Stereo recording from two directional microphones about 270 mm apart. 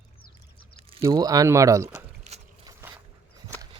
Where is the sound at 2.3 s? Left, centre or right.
Right.